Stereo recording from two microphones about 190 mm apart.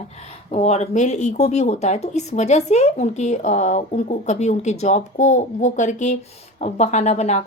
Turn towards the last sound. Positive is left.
turn(degrees=35)  # may be behind; listen again after turning